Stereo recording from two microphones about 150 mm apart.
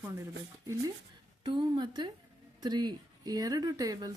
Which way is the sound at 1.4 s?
30° right (ahead or behind).